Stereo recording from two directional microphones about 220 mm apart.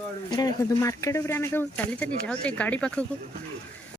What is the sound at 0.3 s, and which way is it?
Speech, 15° left (ahead or behind).